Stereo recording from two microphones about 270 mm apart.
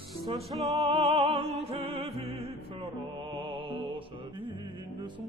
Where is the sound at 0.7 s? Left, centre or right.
Centre.